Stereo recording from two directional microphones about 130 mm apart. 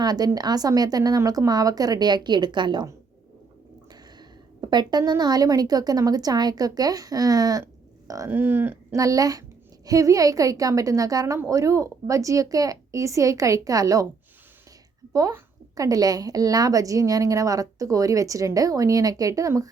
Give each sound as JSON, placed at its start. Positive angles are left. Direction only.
{"t": 0.0, "sound": "a woman's voice", "side_deg": -30}
{"t": 4.6, "sound": "speech", "side_deg": -35}
{"t": 8.3, "sound": "speech", "side_deg": -15}
{"t": 9.0, "sound": "speech", "side_deg": -25}
{"t": 15.7, "sound": "speech", "side_deg": -30}